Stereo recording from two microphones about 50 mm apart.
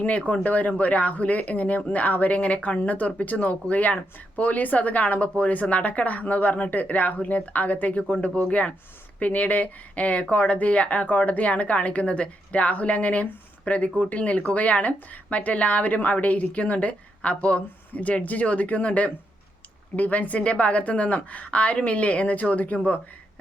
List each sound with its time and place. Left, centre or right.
0.0 s speech: left